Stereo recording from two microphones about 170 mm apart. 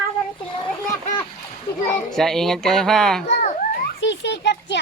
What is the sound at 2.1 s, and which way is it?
Speech, centre (ahead or behind).